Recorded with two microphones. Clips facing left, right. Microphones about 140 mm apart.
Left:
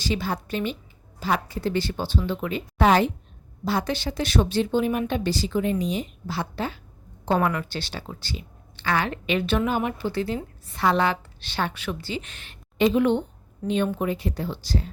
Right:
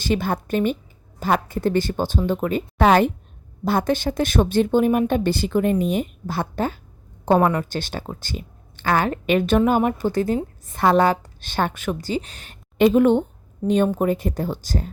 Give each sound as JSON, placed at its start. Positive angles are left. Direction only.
{"t": 0.0, "sound": "speech", "side_deg": -55}
{"t": 7.3, "sound": "speech", "side_deg": -35}